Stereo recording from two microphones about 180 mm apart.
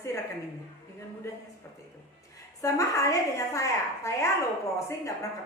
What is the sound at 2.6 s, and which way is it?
A woman's voice, 15° left (ahead or behind).